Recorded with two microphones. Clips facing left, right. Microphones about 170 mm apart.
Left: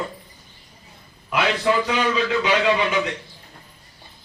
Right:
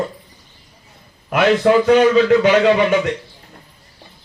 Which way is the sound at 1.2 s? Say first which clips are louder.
Right 7 dB; 55° right (ahead or behind).